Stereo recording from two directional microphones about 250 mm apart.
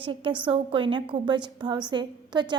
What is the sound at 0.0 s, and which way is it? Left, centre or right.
A woman's voice, centre.